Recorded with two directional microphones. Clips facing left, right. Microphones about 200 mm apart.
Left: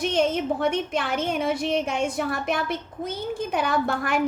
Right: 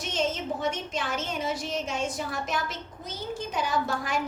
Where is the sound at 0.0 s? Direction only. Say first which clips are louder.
Left 7 dB; 60° left (ahead or behind).